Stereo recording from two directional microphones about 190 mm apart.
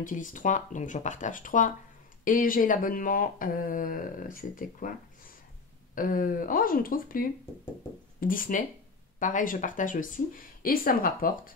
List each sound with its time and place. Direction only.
0.0 s speech: 45° left (ahead or behind)
5.9 s speech: 45° left (ahead or behind)